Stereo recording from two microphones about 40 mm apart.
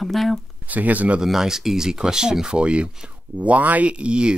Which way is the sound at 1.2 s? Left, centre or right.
Centre.